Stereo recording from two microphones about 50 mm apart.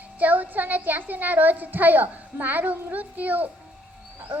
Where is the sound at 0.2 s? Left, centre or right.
Right.